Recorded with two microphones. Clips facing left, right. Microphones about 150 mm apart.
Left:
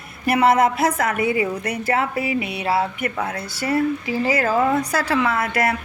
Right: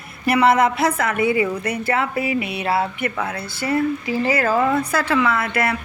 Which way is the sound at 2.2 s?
45° right (ahead or behind).